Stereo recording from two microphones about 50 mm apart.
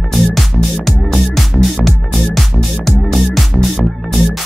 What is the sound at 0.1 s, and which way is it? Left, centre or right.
Music, centre.